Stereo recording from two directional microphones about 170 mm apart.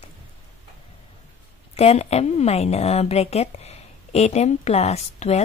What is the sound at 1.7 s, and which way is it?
A woman's voice, 40° left (ahead or behind).